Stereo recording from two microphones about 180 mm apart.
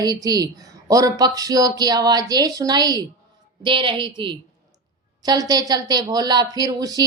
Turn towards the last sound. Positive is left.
turn(degrees=-20)  # may be behind; listen again after turning